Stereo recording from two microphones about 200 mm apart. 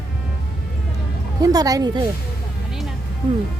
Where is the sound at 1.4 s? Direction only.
20° right (ahead or behind).